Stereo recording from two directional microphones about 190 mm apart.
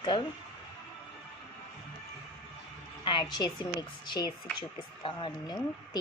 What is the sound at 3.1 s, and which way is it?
A woman's voice, 20° left (ahead or behind).